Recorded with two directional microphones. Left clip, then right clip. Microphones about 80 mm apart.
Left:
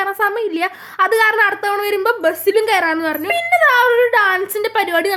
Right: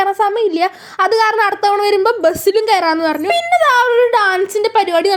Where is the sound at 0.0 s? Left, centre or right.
Right.